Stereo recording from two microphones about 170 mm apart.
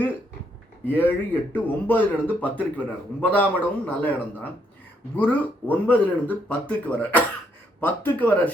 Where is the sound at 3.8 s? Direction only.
10° left (ahead or behind).